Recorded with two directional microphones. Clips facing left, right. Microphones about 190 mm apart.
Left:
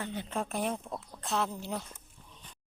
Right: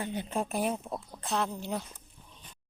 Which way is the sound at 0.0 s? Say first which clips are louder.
Right 3 dB; 15° right (ahead or behind).